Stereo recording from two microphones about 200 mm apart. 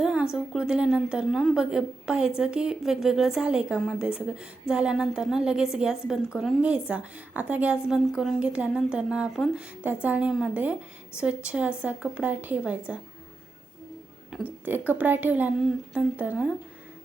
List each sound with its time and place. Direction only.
0.0 s a woman's voice: 5° right (ahead or behind)
14.3 s a woman's voice: 10° right (ahead or behind)